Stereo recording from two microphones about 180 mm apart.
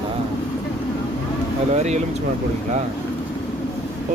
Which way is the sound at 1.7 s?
40° right (ahead or behind).